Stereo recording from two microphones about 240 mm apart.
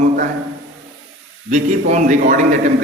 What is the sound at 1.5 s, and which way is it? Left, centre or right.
Speech, right.